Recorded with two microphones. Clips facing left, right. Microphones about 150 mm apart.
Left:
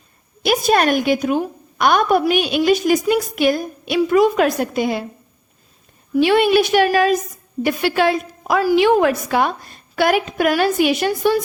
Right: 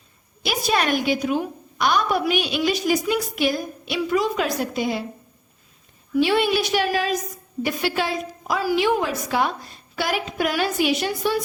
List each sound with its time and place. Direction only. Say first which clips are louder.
0.4 s a woman's voice: left 7 dB; 50° left (ahead or behind)
6.1 s a woman's voice: left 6 dB; 60° left (ahead or behind)